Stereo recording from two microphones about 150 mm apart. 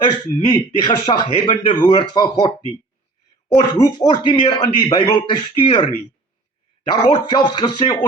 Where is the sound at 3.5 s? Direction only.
30° left (ahead or behind).